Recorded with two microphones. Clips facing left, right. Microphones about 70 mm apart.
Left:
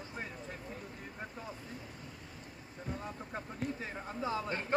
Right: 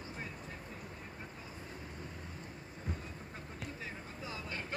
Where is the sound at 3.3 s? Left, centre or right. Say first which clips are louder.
Left 9 dB; left.